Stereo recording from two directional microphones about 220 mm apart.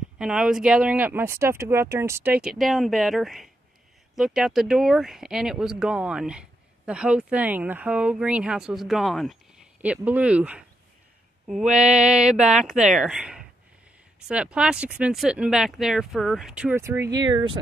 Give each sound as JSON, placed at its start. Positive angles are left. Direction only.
{"t": 0.2, "sound": "speech", "side_deg": -5}